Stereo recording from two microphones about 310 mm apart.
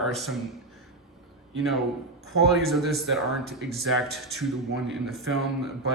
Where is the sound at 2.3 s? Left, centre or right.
Centre.